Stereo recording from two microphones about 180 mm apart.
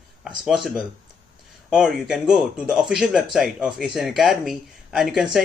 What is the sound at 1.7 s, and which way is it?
Speech, 5° right (ahead or behind).